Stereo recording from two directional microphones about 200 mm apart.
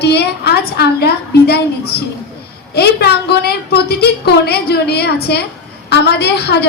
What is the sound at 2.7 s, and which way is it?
A woman's voice, 55° left (ahead or behind).